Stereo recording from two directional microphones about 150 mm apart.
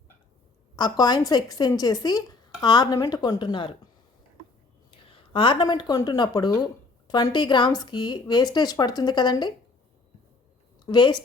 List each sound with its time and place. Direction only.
0.8 s speech: 30° left (ahead or behind)
4.9 s a woman's voice: 35° left (ahead or behind)
10.8 s speech: 30° left (ahead or behind)